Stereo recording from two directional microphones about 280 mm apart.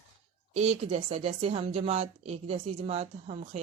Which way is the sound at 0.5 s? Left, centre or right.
Right.